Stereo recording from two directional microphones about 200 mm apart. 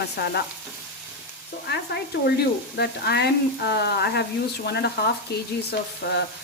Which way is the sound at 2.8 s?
55° left (ahead or behind).